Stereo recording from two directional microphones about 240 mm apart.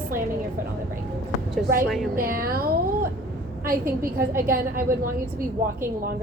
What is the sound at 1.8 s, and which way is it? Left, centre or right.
Speech, centre.